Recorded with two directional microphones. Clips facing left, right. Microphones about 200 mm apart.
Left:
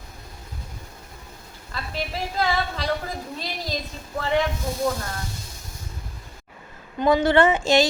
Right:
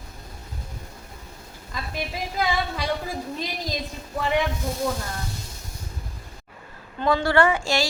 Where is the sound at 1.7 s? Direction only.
15° right (ahead or behind).